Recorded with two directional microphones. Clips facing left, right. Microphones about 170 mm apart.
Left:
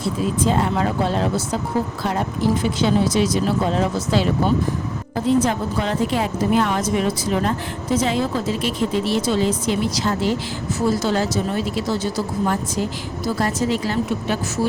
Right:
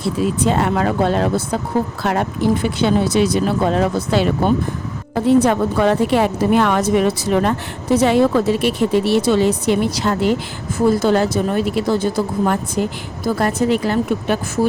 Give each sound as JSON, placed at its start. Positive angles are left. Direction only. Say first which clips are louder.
{"t": 0.4, "sound": "speech", "louder": "right 2 dB", "side_deg": -65}